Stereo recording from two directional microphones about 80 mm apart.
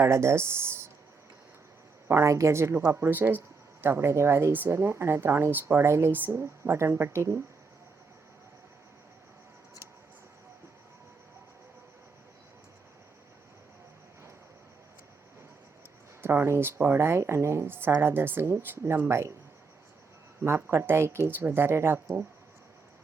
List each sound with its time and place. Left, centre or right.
0.0 s speech: right
2.0 s speech: right
16.2 s speech: right
20.7 s speech: right